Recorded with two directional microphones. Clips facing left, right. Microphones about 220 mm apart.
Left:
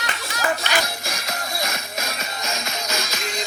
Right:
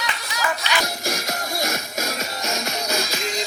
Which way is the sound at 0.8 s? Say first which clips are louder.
Right 4 dB; 45° right (ahead or behind).